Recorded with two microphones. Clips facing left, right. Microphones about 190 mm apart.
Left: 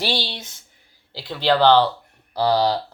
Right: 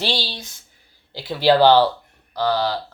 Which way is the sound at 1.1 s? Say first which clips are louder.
Right 4 dB; 5° right (ahead or behind).